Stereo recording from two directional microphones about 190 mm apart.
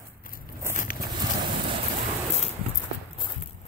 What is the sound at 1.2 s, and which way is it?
Boat, 25° right (ahead or behind).